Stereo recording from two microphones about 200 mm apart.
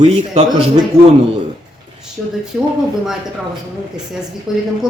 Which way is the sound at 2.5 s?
5° right (ahead or behind).